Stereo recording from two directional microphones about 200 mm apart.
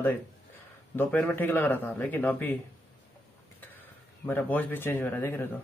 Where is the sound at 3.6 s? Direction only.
10° left (ahead or behind).